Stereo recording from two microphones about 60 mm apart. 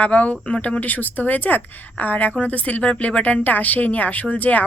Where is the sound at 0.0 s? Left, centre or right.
Left.